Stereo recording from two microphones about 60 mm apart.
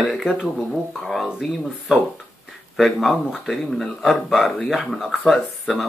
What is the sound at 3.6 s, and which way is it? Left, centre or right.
Speech, centre.